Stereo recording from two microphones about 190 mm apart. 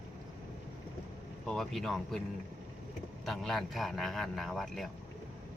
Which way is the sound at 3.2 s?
Centre (ahead or behind).